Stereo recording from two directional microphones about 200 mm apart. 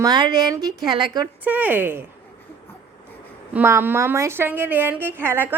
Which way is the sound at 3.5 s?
10° right (ahead or behind).